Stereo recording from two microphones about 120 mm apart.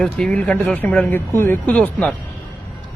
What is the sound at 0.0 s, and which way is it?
A man's voice, 5° left (ahead or behind).